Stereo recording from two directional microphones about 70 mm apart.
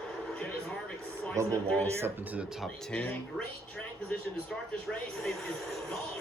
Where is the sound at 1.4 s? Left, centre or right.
Right.